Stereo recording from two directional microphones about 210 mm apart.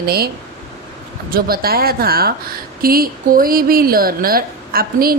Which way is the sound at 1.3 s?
45° right (ahead or behind).